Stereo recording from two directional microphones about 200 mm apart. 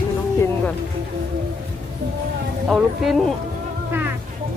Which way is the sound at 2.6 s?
Centre (ahead or behind).